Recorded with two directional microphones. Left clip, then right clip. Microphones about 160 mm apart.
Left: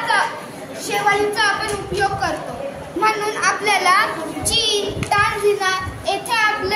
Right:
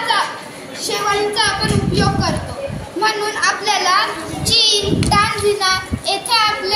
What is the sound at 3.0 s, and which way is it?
A woman's voice, 30° left (ahead or behind).